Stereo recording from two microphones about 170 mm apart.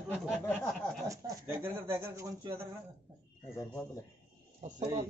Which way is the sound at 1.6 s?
15° right (ahead or behind).